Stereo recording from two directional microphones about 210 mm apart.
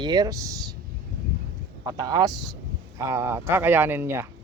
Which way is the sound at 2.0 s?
20° right (ahead or behind).